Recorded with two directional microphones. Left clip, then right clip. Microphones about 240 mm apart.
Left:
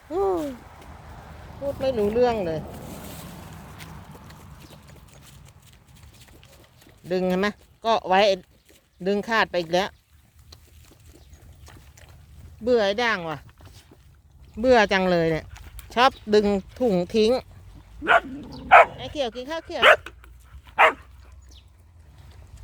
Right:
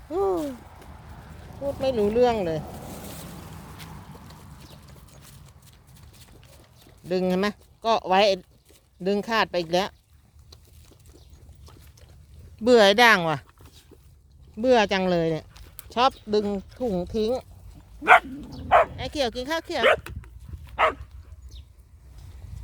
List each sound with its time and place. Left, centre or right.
0.1 s a sound: centre
0.5 s a sound: left
1.8 s speech: centre
2.8 s boat: right
7.1 s speech: centre
12.6 s speech: right
14.5 s speech: centre
16.4 s speech: left
18.0 s speech: right
18.9 s speech: right
20.7 s dog: left